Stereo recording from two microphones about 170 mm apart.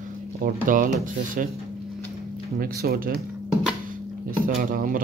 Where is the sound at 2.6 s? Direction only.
60° right (ahead or behind).